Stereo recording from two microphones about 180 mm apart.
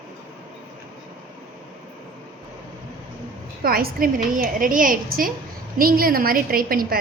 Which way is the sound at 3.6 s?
55° right (ahead or behind).